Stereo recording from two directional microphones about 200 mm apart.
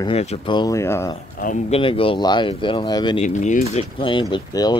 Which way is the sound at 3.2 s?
35° left (ahead or behind).